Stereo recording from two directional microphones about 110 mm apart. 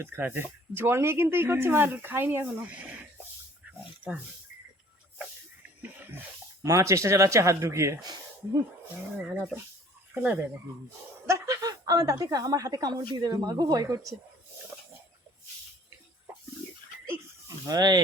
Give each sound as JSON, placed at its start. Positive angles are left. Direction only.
{"t": 0.0, "sound": "speech", "side_deg": -20}
{"t": 6.6, "sound": "speech", "side_deg": -30}
{"t": 8.0, "sound": "speech", "side_deg": -40}
{"t": 9.3, "sound": "speech", "side_deg": -10}
{"t": 11.3, "sound": "a woman's voice", "side_deg": -30}
{"t": 17.7, "sound": "a woman's voice", "side_deg": -35}